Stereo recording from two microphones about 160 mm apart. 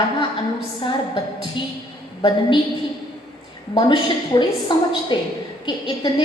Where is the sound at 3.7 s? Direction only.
30° left (ahead or behind).